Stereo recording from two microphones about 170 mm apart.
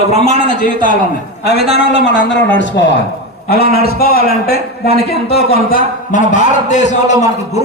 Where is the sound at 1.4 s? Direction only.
75° left (ahead or behind); by 2.8 s 90° left.